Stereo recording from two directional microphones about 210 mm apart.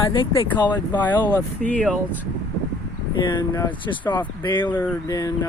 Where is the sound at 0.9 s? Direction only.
10° left (ahead or behind).